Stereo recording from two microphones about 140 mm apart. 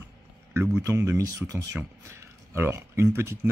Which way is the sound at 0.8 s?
25° right (ahead or behind).